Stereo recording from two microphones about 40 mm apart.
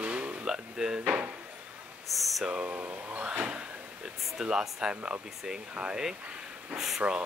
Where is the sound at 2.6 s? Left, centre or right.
Right.